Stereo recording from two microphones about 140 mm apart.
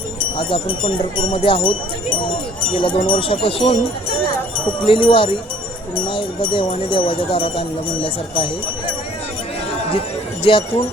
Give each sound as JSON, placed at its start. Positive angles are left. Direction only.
{"t": 0.2, "sound": "speech", "side_deg": 40}
{"t": 10.4, "sound": "speech", "side_deg": 40}